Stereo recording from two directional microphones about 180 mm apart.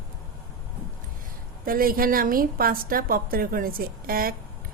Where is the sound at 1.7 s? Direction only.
55° right (ahead or behind).